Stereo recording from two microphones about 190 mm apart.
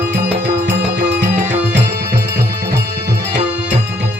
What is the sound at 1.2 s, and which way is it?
Music, 40° right (ahead or behind).